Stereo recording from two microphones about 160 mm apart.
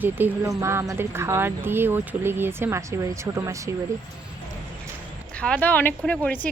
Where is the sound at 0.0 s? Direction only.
10° right (ahead or behind).